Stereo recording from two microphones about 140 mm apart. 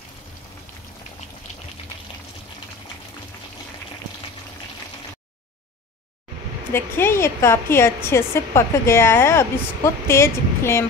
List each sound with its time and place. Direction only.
6.7 s a woman's voice: 15° left (ahead or behind)